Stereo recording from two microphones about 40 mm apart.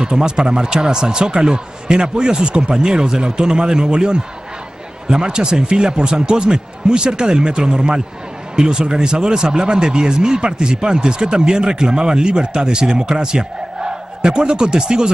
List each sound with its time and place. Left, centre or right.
0.0 s speech: right